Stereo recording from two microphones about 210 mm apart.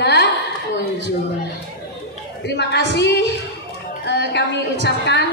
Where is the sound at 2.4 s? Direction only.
55° left (ahead or behind).